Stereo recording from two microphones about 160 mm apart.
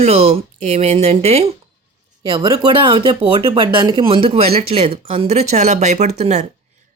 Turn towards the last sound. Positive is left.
turn(degrees=-45)  # may be behind; listen again after turning